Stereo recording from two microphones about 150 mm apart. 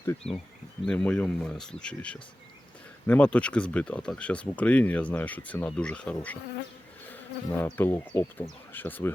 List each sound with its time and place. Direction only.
0.2 s speech: 45° left (ahead or behind)
0.9 s speech: 5° left (ahead or behind)
7.1 s insect: 15° left (ahead or behind)
8.7 s speech: 10° left (ahead or behind)